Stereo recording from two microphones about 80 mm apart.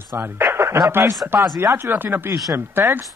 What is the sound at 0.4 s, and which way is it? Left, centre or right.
Speech, right.